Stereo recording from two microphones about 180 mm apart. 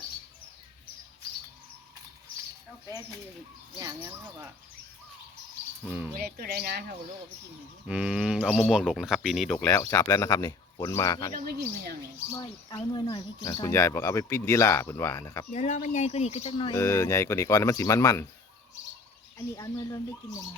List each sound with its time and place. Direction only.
3.8 s speech: 20° right (ahead or behind)
5.8 s speech: 10° right (ahead or behind)
6.1 s speech: 60° right (ahead or behind)
7.9 s speech: 5° right (ahead or behind)
9.8 s speech: 20° left (ahead or behind)
15.5 s speech: 40° left (ahead or behind)
16.7 s speech: 15° left (ahead or behind)
19.5 s speech: 20° left (ahead or behind)